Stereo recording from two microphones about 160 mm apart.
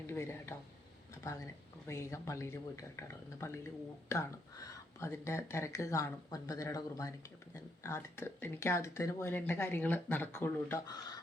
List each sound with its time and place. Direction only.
0.1 s speech: 15° left (ahead or behind)
1.9 s speech: 20° left (ahead or behind)